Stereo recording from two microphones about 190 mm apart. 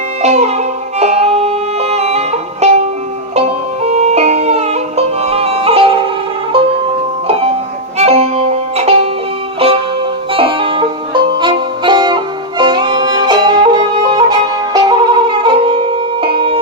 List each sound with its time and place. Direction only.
0.2 s music: 35° right (ahead or behind)
7.9 s music: 35° right (ahead or behind)